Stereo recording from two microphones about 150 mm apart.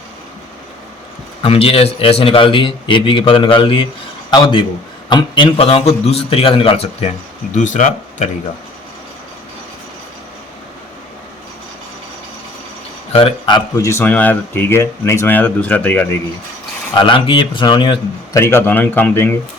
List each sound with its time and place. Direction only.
1.4 s a man's voice: 40° left (ahead or behind)
7.5 s speech: 55° left (ahead or behind)
13.1 s a man's voice: 35° left (ahead or behind)
13.7 s speech: 20° left (ahead or behind)
16.9 s a man's voice: 35° left (ahead or behind)
18.3 s speech: 15° left (ahead or behind)